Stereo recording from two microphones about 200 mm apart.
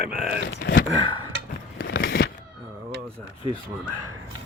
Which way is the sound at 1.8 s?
55° left (ahead or behind).